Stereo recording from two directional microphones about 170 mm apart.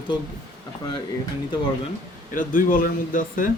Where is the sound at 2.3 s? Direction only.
55° left (ahead or behind).